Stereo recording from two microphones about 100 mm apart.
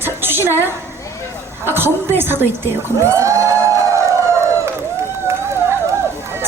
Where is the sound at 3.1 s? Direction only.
30° right (ahead or behind).